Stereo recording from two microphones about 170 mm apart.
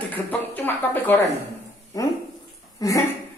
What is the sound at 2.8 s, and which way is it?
Speech, 20° left (ahead or behind).